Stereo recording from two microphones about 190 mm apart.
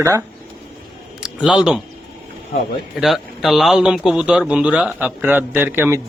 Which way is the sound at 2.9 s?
Centre (ahead or behind).